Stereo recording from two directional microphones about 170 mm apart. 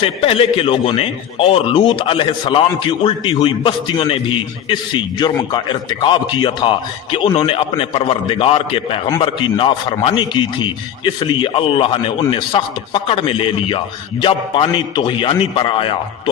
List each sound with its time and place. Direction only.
0.0 s a man's voice: 35° left (ahead or behind)